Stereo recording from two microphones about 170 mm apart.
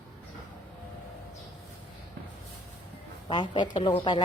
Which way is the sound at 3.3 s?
25° left (ahead or behind).